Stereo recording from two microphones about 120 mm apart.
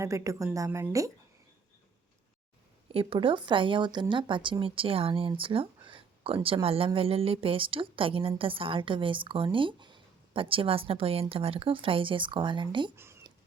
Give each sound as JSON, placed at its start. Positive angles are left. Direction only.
{"t": 0.0, "sound": "a woman's voice", "side_deg": -25}
{"t": 2.9, "sound": "speech", "side_deg": -50}